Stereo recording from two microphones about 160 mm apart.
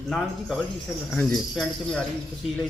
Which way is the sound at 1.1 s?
10° left (ahead or behind).